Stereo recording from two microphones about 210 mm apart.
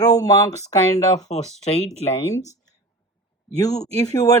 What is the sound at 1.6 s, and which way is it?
Speech, 30° left (ahead or behind).